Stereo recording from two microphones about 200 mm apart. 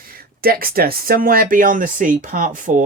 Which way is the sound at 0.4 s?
50° right (ahead or behind).